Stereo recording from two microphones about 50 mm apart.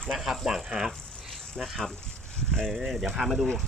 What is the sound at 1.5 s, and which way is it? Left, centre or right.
Speech, centre.